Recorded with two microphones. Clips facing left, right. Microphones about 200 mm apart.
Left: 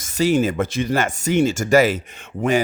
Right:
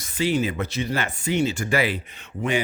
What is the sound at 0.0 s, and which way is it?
Speech, 45° left (ahead or behind).